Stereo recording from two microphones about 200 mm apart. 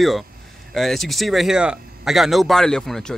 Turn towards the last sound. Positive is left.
turn(degrees=0)  # may be behind; listen again after turning